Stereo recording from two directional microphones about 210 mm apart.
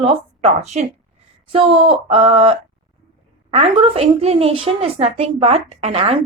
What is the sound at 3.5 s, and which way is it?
A woman's voice, 30° right (ahead or behind).